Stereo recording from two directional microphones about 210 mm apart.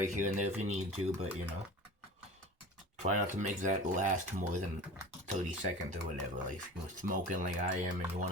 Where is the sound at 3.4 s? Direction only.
35° right (ahead or behind).